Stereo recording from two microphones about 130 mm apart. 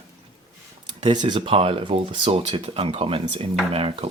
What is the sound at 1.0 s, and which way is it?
Speech, 35° right (ahead or behind).